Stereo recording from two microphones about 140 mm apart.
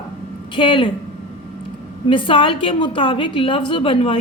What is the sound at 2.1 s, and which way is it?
A woman's voice, 35° left (ahead or behind).